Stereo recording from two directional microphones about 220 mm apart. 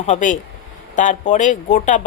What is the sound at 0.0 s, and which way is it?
A man's voice, 35° left (ahead or behind).